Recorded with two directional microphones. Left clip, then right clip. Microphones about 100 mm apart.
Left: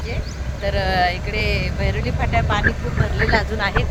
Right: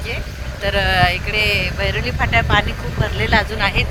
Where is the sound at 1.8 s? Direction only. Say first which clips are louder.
Right 4 dB; 5° right (ahead or behind); by 3.8 s 20° right (ahead or behind).